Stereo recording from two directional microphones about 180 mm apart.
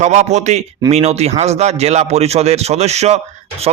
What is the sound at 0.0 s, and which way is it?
A man's voice, 40° right (ahead or behind).